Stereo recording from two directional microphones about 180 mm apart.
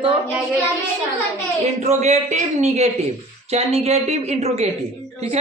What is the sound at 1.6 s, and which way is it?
A woman's voice, 35° right (ahead or behind).